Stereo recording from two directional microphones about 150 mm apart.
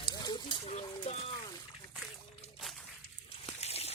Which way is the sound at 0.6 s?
45° left (ahead or behind).